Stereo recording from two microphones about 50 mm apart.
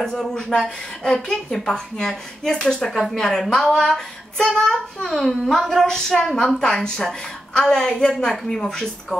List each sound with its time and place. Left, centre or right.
0.0 s speech: centre
5.5 s a sound: centre
5.9 s speech: centre